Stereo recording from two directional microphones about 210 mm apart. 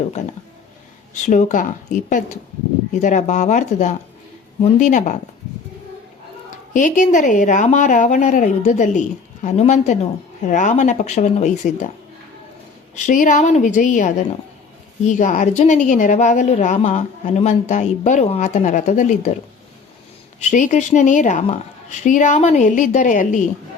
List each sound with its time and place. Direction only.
1.1 s a woman's voice: 35° left (ahead or behind)
6.7 s a woman's voice: 35° left (ahead or behind)
13.1 s a woman's voice: 40° left (ahead or behind)
20.4 s a woman's voice: 35° left (ahead or behind)